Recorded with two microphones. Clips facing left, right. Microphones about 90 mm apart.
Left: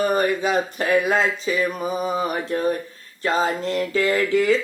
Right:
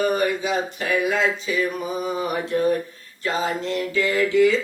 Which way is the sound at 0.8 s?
45° left (ahead or behind).